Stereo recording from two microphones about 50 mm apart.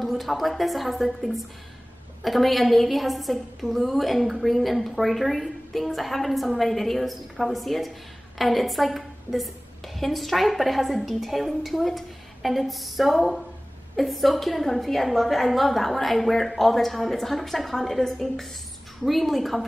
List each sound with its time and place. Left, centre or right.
0.0 s a woman's voice: centre